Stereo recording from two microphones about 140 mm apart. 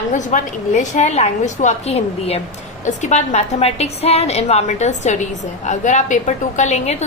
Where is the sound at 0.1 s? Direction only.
60° left (ahead or behind).